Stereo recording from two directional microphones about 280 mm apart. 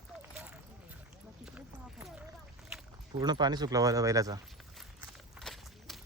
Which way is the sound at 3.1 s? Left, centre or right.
Centre.